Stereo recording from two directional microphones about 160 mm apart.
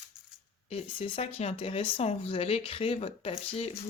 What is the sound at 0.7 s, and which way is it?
Speech, 35° left (ahead or behind).